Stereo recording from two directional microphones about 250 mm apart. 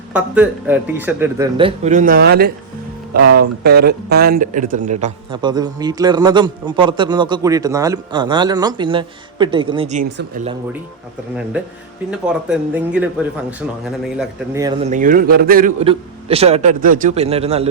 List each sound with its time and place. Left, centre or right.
0.1 s speech: centre
1.5 s a man's voice: right
12.2 s speech: centre
14.2 s a man's voice: centre; by 15.7 s right
15.8 s speech: right